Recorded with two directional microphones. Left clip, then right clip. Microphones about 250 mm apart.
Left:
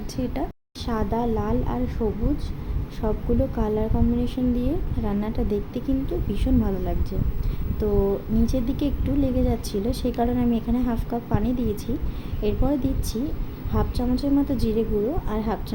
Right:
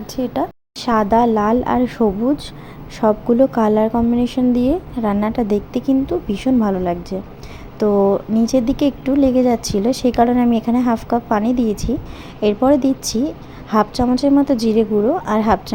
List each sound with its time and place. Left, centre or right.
0.8 s a woman's voice: right